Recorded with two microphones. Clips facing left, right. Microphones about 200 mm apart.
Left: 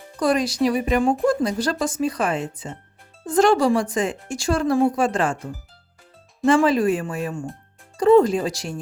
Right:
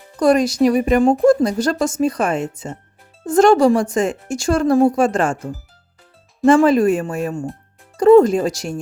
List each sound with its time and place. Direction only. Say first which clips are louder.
0.2 s a woman's voice: right 6 dB; 45° right (ahead or behind)
6.4 s a woman's voice: right 5 dB; 45° right (ahead or behind)